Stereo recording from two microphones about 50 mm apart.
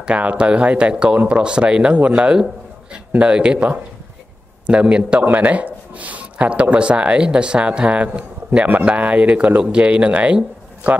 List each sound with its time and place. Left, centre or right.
0.0 s speech: right
5.2 s a man's voice: right